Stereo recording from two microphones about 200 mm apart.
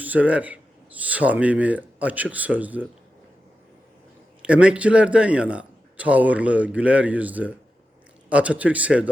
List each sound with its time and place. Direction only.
0.0 s speech: 10° right (ahead or behind)
4.4 s a man's voice: 5° right (ahead or behind)